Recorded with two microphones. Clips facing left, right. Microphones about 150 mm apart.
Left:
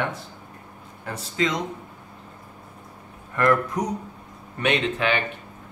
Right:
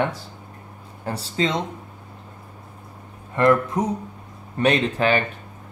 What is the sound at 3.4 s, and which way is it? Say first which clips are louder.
Speech: right 3 dB; 25° right (ahead or behind).